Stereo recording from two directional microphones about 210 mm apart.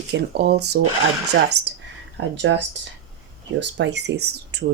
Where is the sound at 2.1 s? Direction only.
55° right (ahead or behind).